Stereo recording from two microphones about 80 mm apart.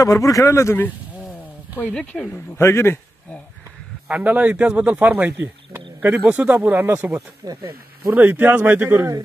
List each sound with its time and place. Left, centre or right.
0.0 s speech: left
1.9 s speech: centre
2.3 s speech: left
4.1 s speech: centre
7.4 s speech: right
8.1 s speech: right